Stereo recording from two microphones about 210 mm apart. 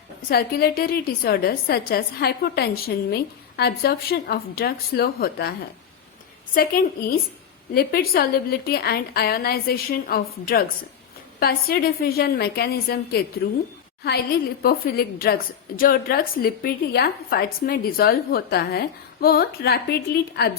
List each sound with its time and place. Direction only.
0.3 s a woman's voice: 45° left (ahead or behind)
14.6 s a woman's voice: 45° left (ahead or behind)